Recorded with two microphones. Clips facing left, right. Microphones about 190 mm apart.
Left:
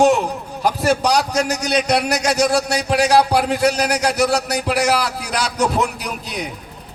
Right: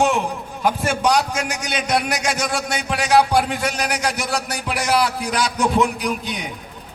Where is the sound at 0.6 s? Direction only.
35° left (ahead or behind).